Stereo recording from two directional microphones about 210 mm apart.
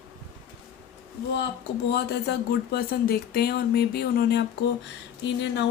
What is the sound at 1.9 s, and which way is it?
Speech, 50° left (ahead or behind).